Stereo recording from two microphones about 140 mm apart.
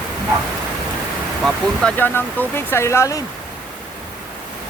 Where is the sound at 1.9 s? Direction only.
15° left (ahead or behind).